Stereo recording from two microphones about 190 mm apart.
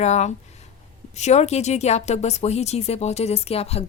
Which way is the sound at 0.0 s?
35° left (ahead or behind).